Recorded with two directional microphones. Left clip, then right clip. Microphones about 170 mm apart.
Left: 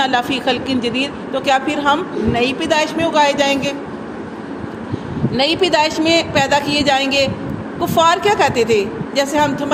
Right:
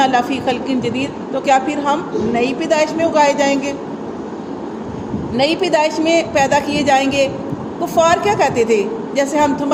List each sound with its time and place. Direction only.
0.0 s a woman's voice: 40° left (ahead or behind)
5.4 s a woman's voice: 40° left (ahead or behind)